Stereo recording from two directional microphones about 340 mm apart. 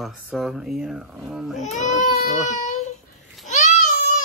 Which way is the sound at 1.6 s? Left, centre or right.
Left.